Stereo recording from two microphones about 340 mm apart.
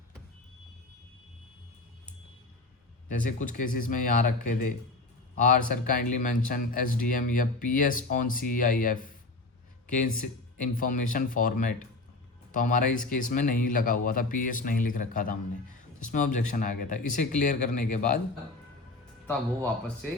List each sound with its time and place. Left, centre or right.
3.2 s speech: left